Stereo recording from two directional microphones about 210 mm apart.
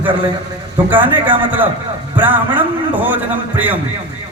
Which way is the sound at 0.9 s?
10° right (ahead or behind).